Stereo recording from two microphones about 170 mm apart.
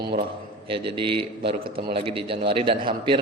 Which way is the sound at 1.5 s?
30° right (ahead or behind).